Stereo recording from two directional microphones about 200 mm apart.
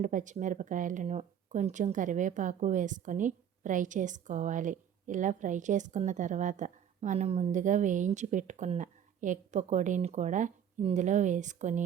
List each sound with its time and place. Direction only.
0.0 s speech: 40° right (ahead or behind)